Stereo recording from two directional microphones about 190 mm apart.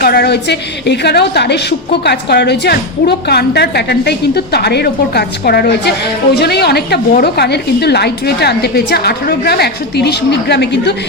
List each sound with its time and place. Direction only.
0.0 s a woman's voice: 55° left (ahead or behind)